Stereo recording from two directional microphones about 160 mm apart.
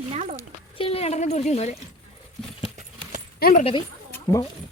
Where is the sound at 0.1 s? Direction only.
50° right (ahead or behind).